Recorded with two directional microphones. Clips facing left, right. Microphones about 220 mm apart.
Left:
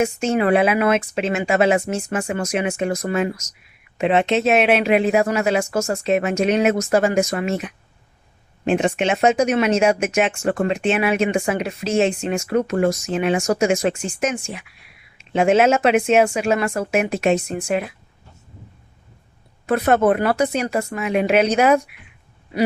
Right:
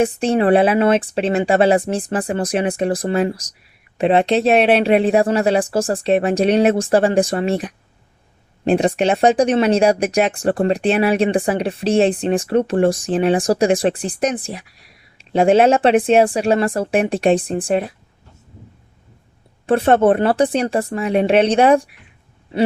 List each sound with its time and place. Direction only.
0.0 s speech: 35° right (ahead or behind)
19.6 s speech: 30° right (ahead or behind)